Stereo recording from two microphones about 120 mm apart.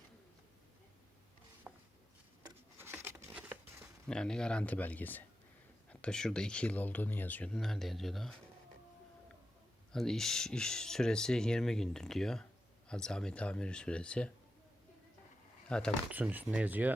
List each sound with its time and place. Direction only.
1.7 s a sound: 10° right (ahead or behind)
2.7 s patter: 20° right (ahead or behind)
4.0 s speech: 5° left (ahead or behind)
7.5 s speech: centre (ahead or behind)
9.9 s speech: 5° left (ahead or behind)
15.7 s speech: 10° left (ahead or behind)
16.1 s speech: 15° right (ahead or behind)